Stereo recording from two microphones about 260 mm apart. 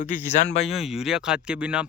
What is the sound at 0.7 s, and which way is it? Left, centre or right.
Speech, centre.